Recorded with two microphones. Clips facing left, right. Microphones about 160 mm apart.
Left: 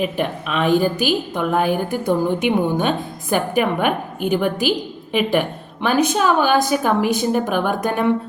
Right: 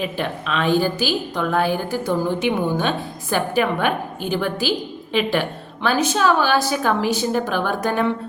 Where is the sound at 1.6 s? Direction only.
55° left (ahead or behind).